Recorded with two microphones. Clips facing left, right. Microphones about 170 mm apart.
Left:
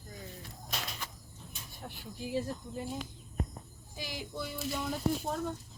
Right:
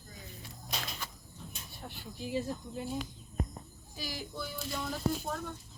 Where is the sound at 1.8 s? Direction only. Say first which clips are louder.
Even; centre (ahead or behind).